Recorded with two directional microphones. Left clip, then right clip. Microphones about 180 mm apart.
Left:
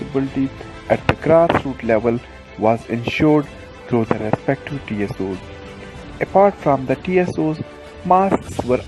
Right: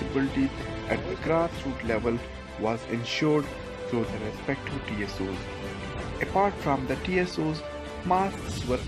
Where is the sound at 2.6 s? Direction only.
40° left (ahead or behind).